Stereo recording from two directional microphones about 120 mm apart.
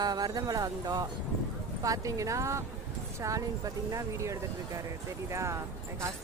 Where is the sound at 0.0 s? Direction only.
35° right (ahead or behind).